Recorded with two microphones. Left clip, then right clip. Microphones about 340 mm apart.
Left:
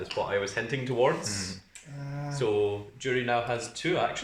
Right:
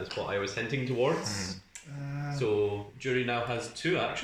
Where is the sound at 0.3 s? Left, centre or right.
Left.